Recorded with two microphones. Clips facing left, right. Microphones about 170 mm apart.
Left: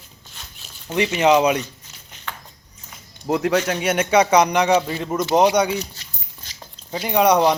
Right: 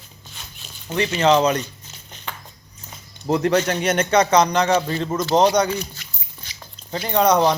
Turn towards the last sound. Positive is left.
turn(degrees=10)  # may be behind; listen again after turning